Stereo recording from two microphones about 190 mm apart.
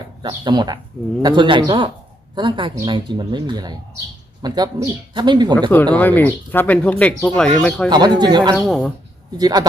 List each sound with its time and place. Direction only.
0.2 s speech: 20° right (ahead or behind)
5.9 s speech: 10° left (ahead or behind)
7.9 s speech: 20° right (ahead or behind)
8.5 s speech: centre (ahead or behind)
9.4 s speech: 20° right (ahead or behind)